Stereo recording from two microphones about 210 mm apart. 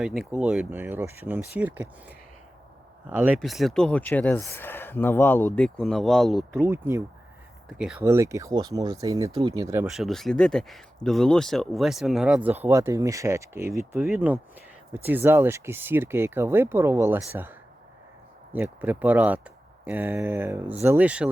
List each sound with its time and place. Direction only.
0.0 s speech: centre (ahead or behind)
6.7 s speech: 10° right (ahead or behind)
9.8 s speech: centre (ahead or behind)